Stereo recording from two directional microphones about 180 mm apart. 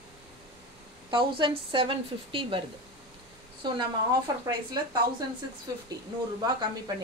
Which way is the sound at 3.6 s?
20° right (ahead or behind).